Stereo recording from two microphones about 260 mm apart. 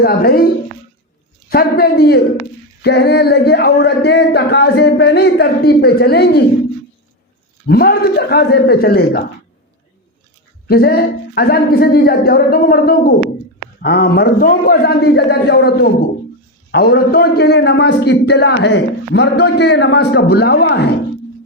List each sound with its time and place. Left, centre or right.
0.0 s a man's voice: left
7.7 s a man's voice: left
10.7 s a man's voice: left